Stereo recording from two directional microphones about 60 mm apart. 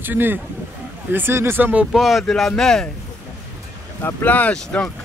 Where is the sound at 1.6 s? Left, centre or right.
Right.